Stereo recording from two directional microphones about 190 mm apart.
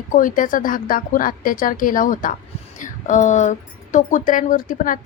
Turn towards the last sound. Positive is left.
turn(degrees=45)  # may be behind; listen again after turning